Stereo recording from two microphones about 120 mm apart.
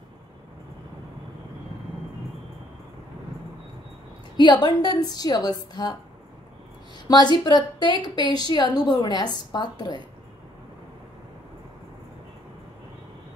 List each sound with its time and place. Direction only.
4.4 s a woman's voice: 35° left (ahead or behind)
7.1 s a woman's voice: 35° left (ahead or behind)